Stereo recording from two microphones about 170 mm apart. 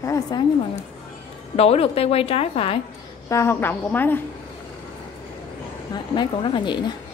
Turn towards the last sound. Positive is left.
turn(degrees=25)  # may be behind; listen again after turning